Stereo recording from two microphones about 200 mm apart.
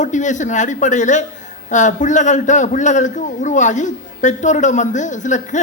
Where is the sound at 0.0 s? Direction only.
40° left (ahead or behind).